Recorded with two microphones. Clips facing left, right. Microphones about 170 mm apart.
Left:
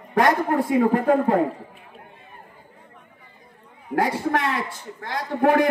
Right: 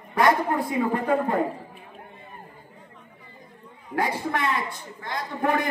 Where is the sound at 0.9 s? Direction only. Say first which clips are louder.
Left 5 dB; 80° left.